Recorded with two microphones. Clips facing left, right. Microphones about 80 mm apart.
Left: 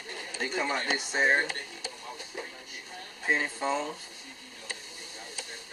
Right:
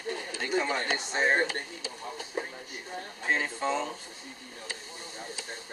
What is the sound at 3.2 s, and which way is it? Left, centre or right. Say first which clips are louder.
Speech: even; centre.